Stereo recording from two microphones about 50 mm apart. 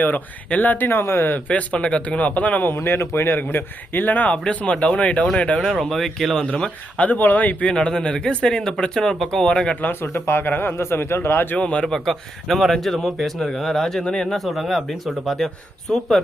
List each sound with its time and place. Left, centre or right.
0.0 s speech: left
1.3 s speech: left
2.7 s a man's voice: left
3.3 s a man's voice: left
4.4 s speech: left
5.6 s speech: centre
6.4 s speech: centre
7.0 s a man's voice: left
7.7 s speech: centre
9.8 s speech: left
10.8 s a man's voice: left
11.5 s speech: left
11.9 s speech: centre
14.3 s speech: centre